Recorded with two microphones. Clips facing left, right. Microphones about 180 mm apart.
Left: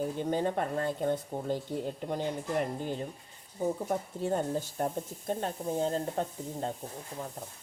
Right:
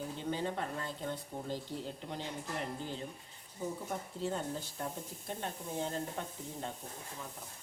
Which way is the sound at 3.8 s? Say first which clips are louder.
Left 6 dB; 50° left (ahead or behind).